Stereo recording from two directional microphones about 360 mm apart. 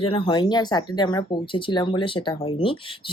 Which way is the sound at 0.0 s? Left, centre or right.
Centre.